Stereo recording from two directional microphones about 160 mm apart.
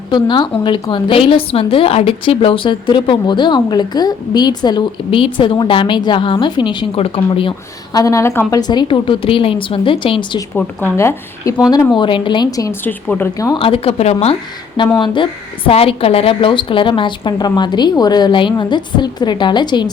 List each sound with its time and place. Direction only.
0.1 s a woman's voice: 30° left (ahead or behind)
7.9 s a woman's voice: 20° left (ahead or behind)
10.5 s speech: 10° left (ahead or behind)
11.9 s a woman's voice: 30° left (ahead or behind); by 13.5 s 10° left (ahead or behind)
13.5 s a woman's voice: 35° left (ahead or behind)
14.9 s a woman's voice: 30° left (ahead or behind)